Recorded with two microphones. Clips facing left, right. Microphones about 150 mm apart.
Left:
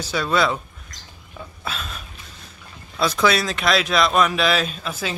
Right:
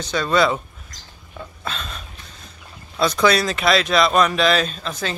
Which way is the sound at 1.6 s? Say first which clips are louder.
Even; 5° left (ahead or behind).